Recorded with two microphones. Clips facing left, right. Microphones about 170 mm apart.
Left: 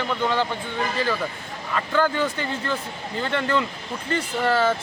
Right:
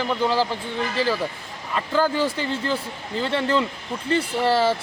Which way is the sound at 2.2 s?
30° right (ahead or behind).